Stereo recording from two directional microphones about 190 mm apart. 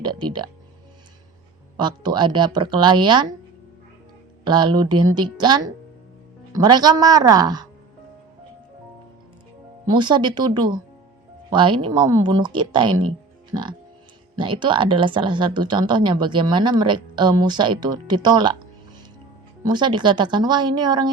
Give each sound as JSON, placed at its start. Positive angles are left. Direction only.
{"t": 0.0, "sound": "speech", "side_deg": -25}
{"t": 1.7, "sound": "speech", "side_deg": -25}
{"t": 4.4, "sound": "speech", "side_deg": -25}
{"t": 9.8, "sound": "speech", "side_deg": -25}
{"t": 19.6, "sound": "speech", "side_deg": -25}